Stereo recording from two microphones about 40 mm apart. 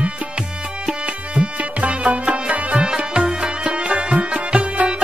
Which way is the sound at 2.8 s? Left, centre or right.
Right.